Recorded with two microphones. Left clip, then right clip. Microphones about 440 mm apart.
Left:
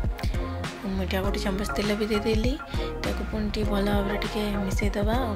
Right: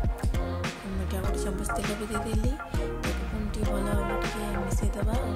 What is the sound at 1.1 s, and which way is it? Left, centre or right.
Music, right.